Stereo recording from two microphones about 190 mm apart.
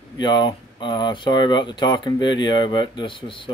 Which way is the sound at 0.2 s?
25° left (ahead or behind).